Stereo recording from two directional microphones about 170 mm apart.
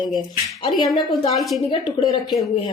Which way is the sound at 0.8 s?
25° left (ahead or behind).